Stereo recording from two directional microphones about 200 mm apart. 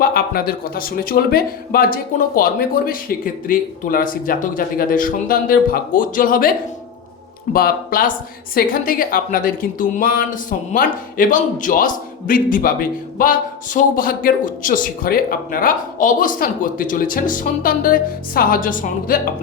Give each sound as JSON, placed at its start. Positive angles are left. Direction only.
{"t": 0.0, "sound": "speech", "side_deg": 50}
{"t": 7.5, "sound": "speech", "side_deg": 45}